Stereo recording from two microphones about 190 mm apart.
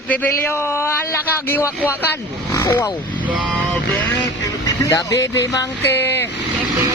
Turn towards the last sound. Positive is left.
turn(degrees=10)  # may be behind; listen again after turning